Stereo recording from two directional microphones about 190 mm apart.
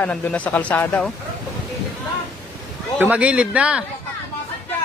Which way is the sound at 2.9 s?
5° right (ahead or behind).